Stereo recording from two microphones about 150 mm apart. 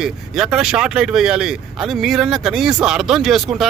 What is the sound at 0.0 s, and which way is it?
Speech, centre (ahead or behind).